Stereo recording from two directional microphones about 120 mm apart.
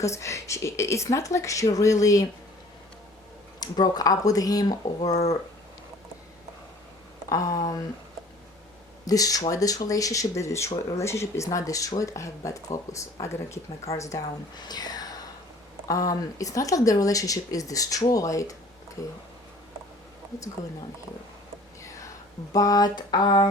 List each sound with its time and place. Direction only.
0.0 s speech: 25° left (ahead or behind)
3.6 s speech: 35° left (ahead or behind)
7.3 s speech: 30° left (ahead or behind)
9.0 s speech: 30° left (ahead or behind)
21.8 s whispering: 25° left (ahead or behind)
22.5 s speech: 30° left (ahead or behind)